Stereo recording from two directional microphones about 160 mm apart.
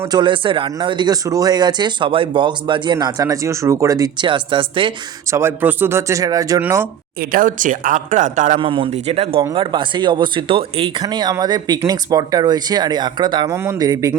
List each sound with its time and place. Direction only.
0.1 s speech: 30° right (ahead or behind)
5.3 s speech: 15° right (ahead or behind)
7.2 s speech: 55° right (ahead or behind)
8.5 s speech: 30° right (ahead or behind)